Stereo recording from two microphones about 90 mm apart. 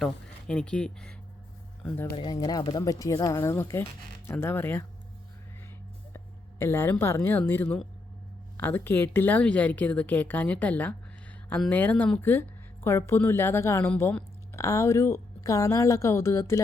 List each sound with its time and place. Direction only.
0.0 s speech: 10° left (ahead or behind)
2.5 s a woman's voice: 50° left (ahead or behind); by 4.9 s 25° left (ahead or behind)
6.1 s a sound: 25° left (ahead or behind)
7.0 s a woman's voice: 25° left (ahead or behind)